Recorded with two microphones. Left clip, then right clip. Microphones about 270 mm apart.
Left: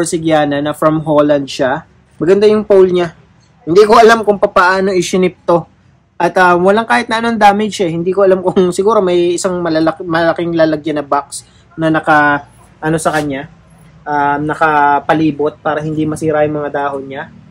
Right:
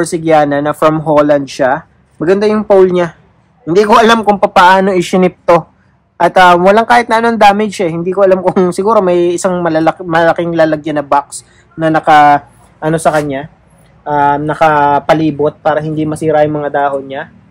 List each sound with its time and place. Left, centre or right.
0.0 s speech: centre
4.0 s speech: right